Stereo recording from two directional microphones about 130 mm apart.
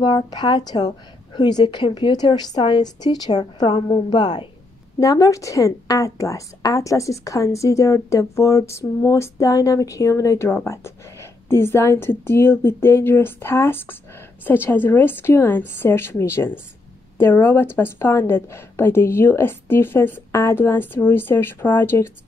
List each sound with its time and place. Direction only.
0.0 s a woman's voice: 35° left (ahead or behind); by 22.1 s 20° left (ahead or behind)